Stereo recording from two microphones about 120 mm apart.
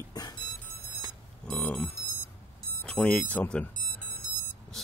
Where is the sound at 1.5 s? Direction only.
10° left (ahead or behind).